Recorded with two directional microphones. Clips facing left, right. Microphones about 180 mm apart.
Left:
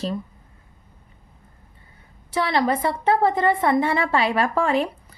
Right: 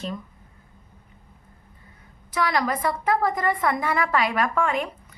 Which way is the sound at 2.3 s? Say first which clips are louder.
Left 3 dB; 30° left (ahead or behind).